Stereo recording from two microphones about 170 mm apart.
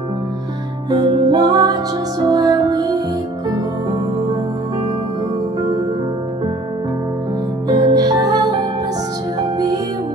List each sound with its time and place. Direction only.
0.8 s music: 25° right (ahead or behind)
7.6 s music: 20° right (ahead or behind)